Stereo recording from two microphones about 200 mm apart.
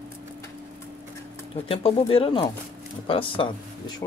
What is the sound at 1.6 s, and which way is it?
Speech, 30° left (ahead or behind).